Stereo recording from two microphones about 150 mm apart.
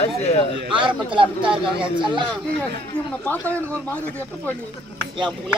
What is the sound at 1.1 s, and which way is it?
Speech, 35° right (ahead or behind).